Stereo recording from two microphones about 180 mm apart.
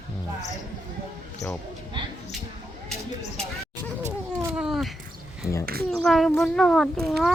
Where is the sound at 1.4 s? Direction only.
20° left (ahead or behind).